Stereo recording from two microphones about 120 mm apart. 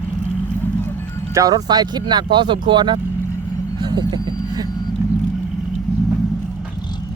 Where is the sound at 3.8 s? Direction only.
35° right (ahead or behind).